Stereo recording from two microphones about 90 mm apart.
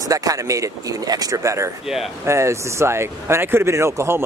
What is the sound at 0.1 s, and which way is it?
Speech, 40° right (ahead or behind).